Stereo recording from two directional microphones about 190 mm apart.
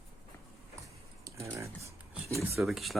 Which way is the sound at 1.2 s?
15° right (ahead or behind).